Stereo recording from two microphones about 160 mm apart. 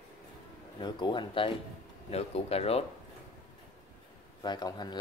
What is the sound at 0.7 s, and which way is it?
Speech, 30° left (ahead or behind).